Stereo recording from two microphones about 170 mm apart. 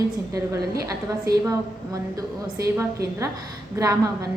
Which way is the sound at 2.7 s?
20° right (ahead or behind).